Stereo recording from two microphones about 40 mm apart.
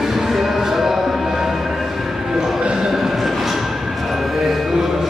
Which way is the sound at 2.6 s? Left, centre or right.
Right.